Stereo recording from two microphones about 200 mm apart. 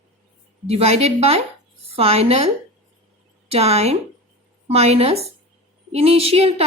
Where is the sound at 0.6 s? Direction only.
30° right (ahead or behind).